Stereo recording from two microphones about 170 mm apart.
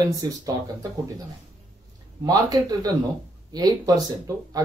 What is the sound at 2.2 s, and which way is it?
Speech, 20° right (ahead or behind).